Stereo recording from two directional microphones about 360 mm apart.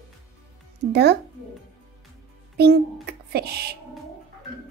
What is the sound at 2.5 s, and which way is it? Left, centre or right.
A child's voice, right.